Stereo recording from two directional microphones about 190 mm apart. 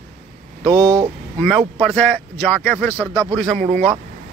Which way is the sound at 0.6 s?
25° right (ahead or behind).